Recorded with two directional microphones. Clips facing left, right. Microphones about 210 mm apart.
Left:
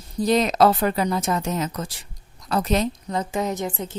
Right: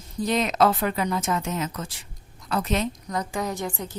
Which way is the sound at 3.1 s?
25° left (ahead or behind).